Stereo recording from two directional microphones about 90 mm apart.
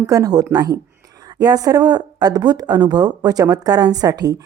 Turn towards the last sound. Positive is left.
turn(degrees=-45)  # may be behind; listen again after turning